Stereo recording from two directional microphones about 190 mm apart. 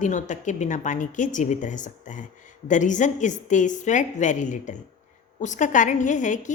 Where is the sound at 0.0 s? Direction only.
40° left (ahead or behind).